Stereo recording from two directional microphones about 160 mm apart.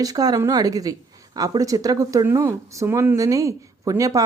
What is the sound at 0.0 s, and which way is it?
Speech, 25° right (ahead or behind).